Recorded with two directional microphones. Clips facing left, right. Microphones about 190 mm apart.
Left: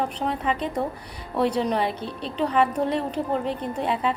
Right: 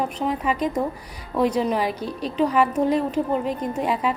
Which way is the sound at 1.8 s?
30° left (ahead or behind).